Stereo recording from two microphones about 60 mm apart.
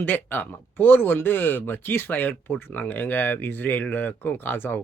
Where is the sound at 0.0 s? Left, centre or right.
Left.